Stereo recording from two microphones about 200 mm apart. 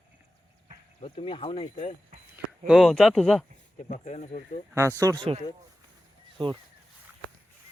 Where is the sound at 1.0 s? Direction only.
30° left (ahead or behind).